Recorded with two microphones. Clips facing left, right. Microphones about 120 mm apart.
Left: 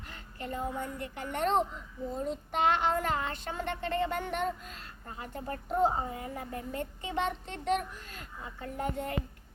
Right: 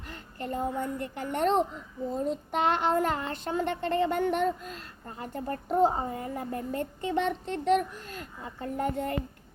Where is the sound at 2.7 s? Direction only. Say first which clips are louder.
Right 3 dB; 40° right (ahead or behind).